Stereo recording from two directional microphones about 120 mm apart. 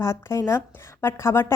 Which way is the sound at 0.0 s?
25° left (ahead or behind).